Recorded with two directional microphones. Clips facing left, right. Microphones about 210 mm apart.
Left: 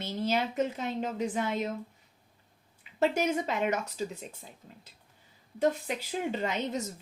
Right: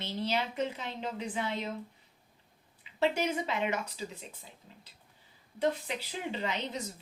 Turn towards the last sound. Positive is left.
turn(degrees=45)  # may be behind; listen again after turning